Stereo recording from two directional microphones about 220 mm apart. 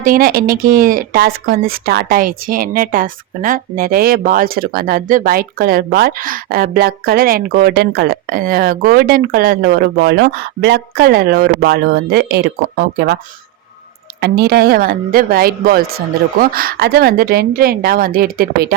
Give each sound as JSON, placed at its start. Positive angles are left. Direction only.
{"t": 0.0, "sound": "speech", "side_deg": -40}
{"t": 14.2, "sound": "speech", "side_deg": -45}